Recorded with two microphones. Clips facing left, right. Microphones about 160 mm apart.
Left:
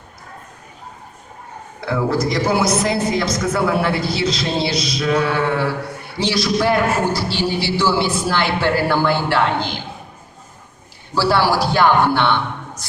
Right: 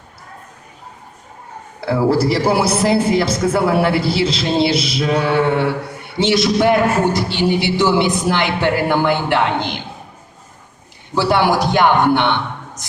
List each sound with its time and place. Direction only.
1.8 s a man's voice: 30° right (ahead or behind)
11.1 s a man's voice: 20° right (ahead or behind)